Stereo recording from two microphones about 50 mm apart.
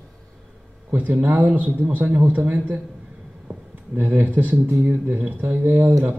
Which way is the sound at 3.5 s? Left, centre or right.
Right.